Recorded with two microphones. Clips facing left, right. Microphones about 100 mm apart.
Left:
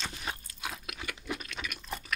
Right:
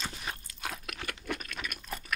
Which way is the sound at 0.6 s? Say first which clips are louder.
Right 4 dB; 50° right (ahead or behind).